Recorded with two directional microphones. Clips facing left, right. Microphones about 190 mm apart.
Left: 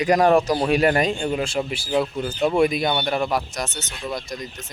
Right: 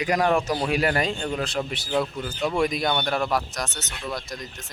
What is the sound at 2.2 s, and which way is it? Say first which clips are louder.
Speech: left 5 dB; 30° left (ahead or behind).